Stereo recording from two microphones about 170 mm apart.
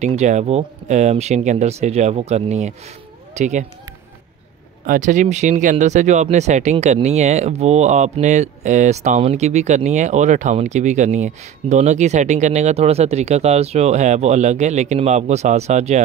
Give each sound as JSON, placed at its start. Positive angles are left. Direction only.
{"t": 0.0, "sound": "speech", "side_deg": -40}
{"t": 4.8, "sound": "speech", "side_deg": -50}